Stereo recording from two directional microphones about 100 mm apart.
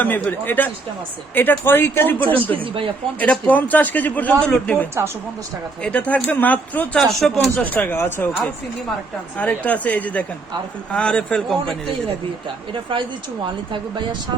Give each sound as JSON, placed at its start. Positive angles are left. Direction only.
{"t": 0.0, "sound": "a man's voice", "side_deg": 15}
{"t": 2.2, "sound": "speech", "side_deg": -65}
{"t": 3.2, "sound": "a man's voice", "side_deg": 15}
{"t": 9.4, "sound": "a man's voice", "side_deg": 15}
{"t": 12.7, "sound": "speech", "side_deg": -55}